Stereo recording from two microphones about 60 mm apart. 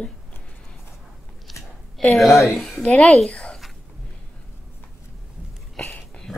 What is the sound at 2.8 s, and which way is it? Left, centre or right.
Speech, centre.